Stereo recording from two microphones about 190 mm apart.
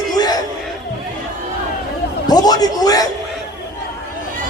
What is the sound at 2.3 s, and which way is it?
Speech, 20° left (ahead or behind).